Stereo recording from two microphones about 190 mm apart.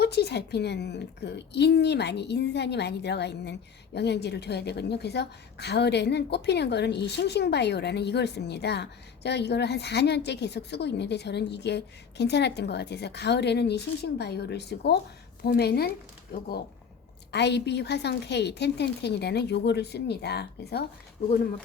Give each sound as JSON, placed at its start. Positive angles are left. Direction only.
{"t": 0.0, "sound": "a woman's voice", "side_deg": 60}
{"t": 17.3, "sound": "a woman's voice", "side_deg": 65}